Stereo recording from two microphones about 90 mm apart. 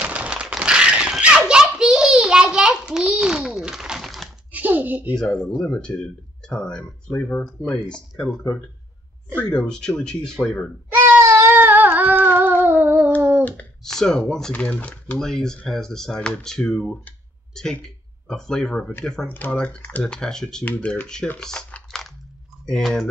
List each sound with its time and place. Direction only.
0.0 s a sound: 15° right (ahead or behind)
4.5 s a child's voice: 20° right (ahead or behind)
5.2 s speech: 5° left (ahead or behind)
9.4 s speech: 15° left (ahead or behind)
11.1 s a sound: 30° right (ahead or behind)
13.4 s speech: 15° left (ahead or behind)
13.8 s speech: 5° left (ahead or behind)
19.2 s speech: 20° left (ahead or behind)
20.6 s speech: 20° left (ahead or behind)
21.4 s typing: 10° left (ahead or behind)
22.7 s speech: 5° left (ahead or behind)